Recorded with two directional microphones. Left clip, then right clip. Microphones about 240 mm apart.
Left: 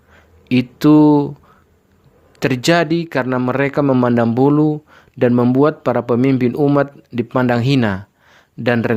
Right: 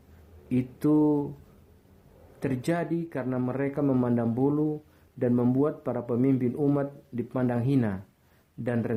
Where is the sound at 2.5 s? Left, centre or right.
Left.